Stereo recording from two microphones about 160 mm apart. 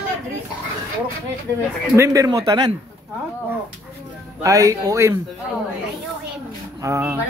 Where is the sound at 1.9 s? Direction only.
20° right (ahead or behind).